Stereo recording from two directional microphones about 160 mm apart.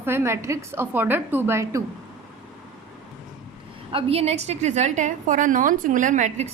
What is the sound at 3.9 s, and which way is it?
A woman's voice, 40° right (ahead or behind).